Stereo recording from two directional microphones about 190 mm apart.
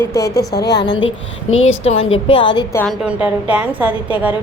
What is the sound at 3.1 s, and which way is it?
A woman's voice, 5° right (ahead or behind).